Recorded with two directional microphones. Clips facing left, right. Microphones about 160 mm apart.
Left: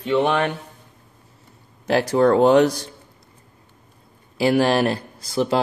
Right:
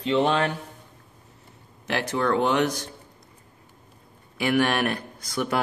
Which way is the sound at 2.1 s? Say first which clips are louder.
Left 9 dB; 35° left (ahead or behind).